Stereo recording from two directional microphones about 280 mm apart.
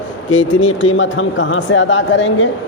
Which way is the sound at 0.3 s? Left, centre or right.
Left.